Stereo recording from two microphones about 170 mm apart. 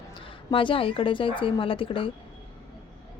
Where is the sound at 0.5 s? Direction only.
30° left (ahead or behind).